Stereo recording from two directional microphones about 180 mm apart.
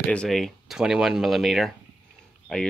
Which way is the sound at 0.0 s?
5° left (ahead or behind).